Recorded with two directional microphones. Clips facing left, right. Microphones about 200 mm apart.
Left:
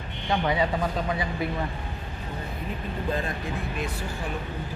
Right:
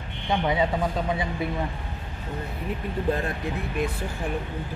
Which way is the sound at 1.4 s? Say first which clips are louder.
Even; 25° right (ahead or behind).